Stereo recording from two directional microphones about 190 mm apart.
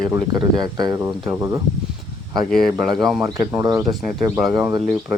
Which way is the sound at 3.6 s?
20° right (ahead or behind).